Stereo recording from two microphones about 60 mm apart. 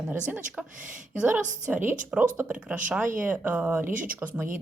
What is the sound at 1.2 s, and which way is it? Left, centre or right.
Speech, right.